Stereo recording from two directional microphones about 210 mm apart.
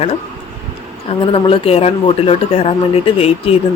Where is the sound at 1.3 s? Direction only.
25° left (ahead or behind).